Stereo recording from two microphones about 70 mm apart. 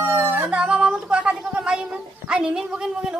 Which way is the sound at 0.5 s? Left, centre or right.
Centre.